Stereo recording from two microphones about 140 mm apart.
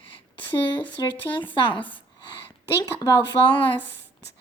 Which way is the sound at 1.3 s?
35° left (ahead or behind).